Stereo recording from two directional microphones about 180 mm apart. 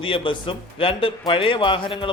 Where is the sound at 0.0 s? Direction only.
30° left (ahead or behind).